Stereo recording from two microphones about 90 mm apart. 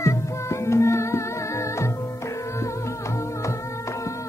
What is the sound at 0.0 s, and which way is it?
Music, 30° left (ahead or behind).